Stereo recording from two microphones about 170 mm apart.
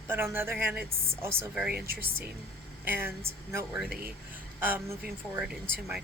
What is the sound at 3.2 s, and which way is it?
A man's voice, 15° right (ahead or behind).